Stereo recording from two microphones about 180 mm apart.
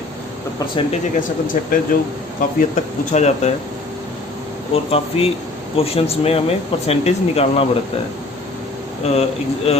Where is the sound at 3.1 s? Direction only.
40° left (ahead or behind).